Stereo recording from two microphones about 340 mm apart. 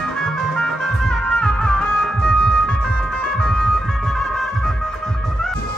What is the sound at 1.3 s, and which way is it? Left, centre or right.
Music, centre.